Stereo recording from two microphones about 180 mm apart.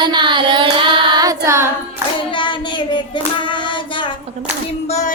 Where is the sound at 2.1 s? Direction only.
25° left (ahead or behind).